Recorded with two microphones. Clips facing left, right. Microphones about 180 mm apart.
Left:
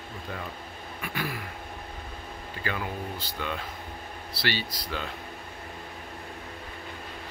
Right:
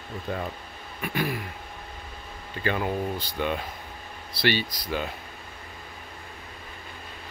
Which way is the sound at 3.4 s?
20° right (ahead or behind).